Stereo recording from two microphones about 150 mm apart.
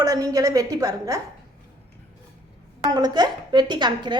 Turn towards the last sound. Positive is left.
turn(degrees=-30)  # may be behind; listen again after turning